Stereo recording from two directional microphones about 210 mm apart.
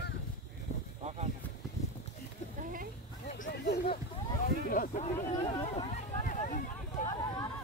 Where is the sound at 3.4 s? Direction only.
50° left (ahead or behind).